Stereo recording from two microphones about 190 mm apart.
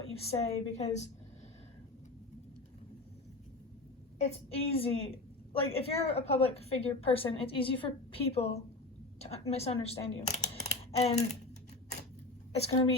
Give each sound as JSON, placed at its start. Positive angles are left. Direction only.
{"t": 0.2, "sound": "a woman's voice", "side_deg": 35}
{"t": 4.2, "sound": "a woman's voice", "side_deg": 30}